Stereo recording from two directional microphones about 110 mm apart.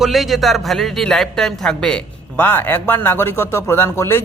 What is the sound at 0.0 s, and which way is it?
A man's voice, centre (ahead or behind).